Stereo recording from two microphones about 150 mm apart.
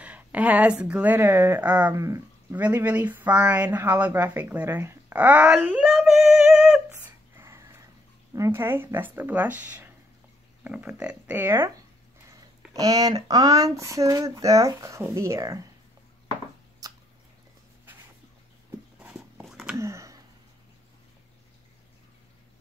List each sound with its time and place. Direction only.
0.0 s speech: 10° right (ahead or behind)
2.0 s speech: 20° right (ahead or behind)
2.6 s speech: 10° right (ahead or behind)
5.9 s female singing: centre (ahead or behind)
7.3 s a sound: 20° right (ahead or behind)
8.3 s speech: 20° right (ahead or behind)
16.8 s drip: 25° right (ahead or behind)
18.9 s a sound: 10° right (ahead or behind)
19.8 s a sound: 20° right (ahead or behind)